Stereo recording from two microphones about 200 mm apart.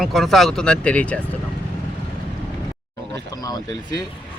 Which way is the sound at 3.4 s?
20° left (ahead or behind).